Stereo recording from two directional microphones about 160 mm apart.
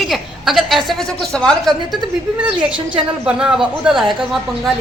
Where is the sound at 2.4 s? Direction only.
10° right (ahead or behind).